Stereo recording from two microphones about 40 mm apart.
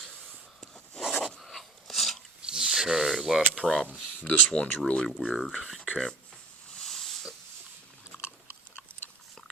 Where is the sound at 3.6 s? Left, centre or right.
Left.